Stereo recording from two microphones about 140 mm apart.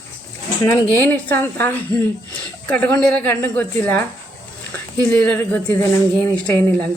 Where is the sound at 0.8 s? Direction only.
15° left (ahead or behind).